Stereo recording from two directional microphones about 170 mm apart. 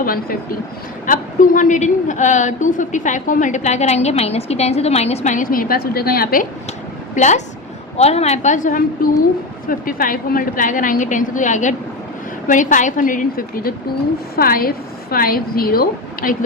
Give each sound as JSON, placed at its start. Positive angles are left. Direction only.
{"t": 0.0, "sound": "a woman's voice", "side_deg": 60}
{"t": 7.2, "sound": "a woman's voice", "side_deg": 45}